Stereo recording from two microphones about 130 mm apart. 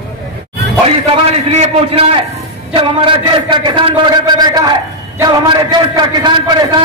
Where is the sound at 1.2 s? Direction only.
50° right (ahead or behind).